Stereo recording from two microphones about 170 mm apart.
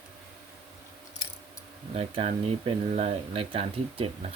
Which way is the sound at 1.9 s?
35° right (ahead or behind).